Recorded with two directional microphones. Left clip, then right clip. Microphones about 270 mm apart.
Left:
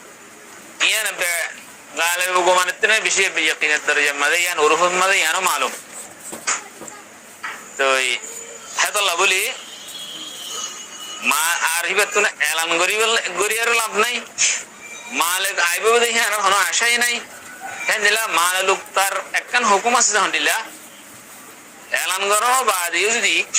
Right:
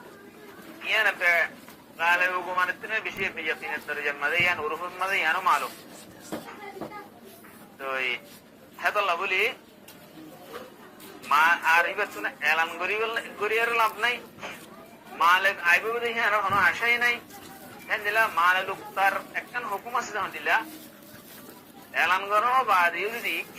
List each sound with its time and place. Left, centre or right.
0.8 s a sound: left
2.0 s a man's voice: left
7.4 s a sound: left
8.7 s a man's voice: left
11.3 s a man's voice: left
15.3 s a man's voice: left
22.0 s a man's voice: left